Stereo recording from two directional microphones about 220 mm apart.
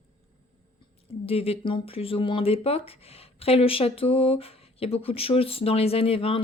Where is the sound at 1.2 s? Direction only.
25° left (ahead or behind).